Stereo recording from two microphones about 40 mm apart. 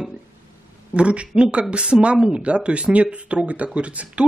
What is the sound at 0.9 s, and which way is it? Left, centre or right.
Speech, right.